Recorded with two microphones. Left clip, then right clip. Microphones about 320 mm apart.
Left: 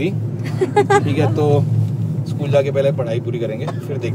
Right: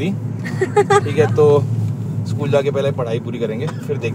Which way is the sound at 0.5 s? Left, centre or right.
Centre.